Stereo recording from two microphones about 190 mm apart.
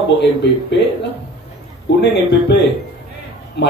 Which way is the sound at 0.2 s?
60° left (ahead or behind).